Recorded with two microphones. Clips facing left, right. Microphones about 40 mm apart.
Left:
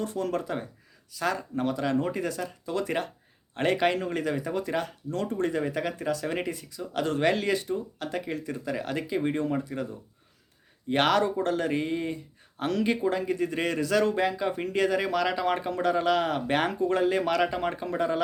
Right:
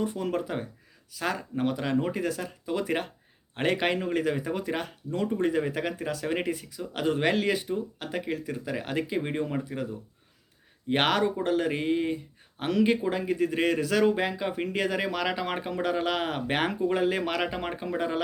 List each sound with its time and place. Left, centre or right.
0.0 s speech: centre
10.8 s speech: centre